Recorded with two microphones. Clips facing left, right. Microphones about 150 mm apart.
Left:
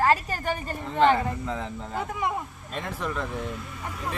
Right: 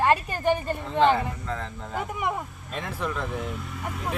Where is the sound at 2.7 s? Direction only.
Centre (ahead or behind).